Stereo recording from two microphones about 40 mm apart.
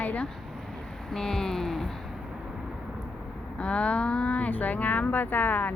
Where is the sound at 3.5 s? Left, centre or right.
Left.